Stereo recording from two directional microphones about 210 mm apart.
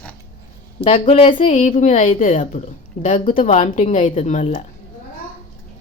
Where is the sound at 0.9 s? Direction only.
30° left (ahead or behind).